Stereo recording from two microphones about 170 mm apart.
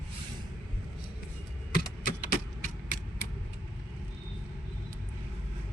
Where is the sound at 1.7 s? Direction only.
55° left (ahead or behind).